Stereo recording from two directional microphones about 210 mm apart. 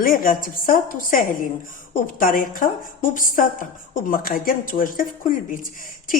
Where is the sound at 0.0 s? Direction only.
40° left (ahead or behind).